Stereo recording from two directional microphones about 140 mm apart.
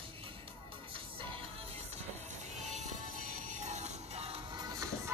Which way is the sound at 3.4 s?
60° right (ahead or behind).